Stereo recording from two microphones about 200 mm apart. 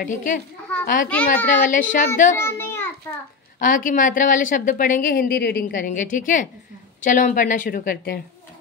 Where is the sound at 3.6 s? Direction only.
40° left (ahead or behind).